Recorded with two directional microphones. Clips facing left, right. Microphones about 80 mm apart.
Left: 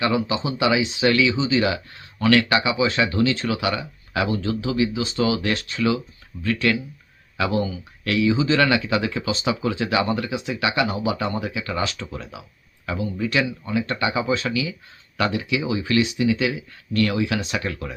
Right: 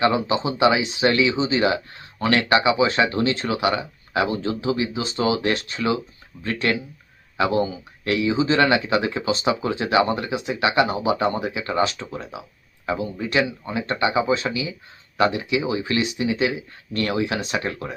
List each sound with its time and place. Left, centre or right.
0.0 s speech: right